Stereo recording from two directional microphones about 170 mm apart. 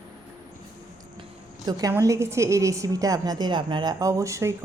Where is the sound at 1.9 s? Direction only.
15° right (ahead or behind).